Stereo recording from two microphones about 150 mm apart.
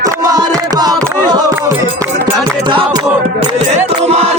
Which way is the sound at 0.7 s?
25° right (ahead or behind).